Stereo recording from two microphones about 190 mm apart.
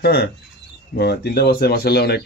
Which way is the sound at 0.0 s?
55° left (ahead or behind).